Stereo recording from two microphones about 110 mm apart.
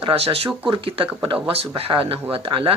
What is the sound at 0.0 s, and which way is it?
Speech, 55° right (ahead or behind).